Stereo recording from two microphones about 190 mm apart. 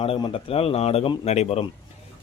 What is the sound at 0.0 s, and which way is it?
Speech, 25° left (ahead or behind).